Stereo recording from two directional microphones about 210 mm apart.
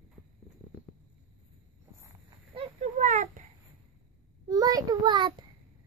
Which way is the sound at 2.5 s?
30° right (ahead or behind).